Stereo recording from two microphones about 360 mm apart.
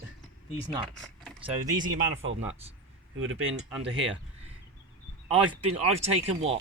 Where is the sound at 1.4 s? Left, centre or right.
Centre.